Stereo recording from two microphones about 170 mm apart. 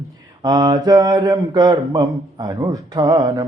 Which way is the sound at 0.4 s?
25° right (ahead or behind).